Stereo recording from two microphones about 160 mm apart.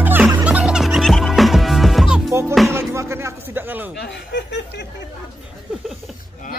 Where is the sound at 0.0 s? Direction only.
10° right (ahead or behind).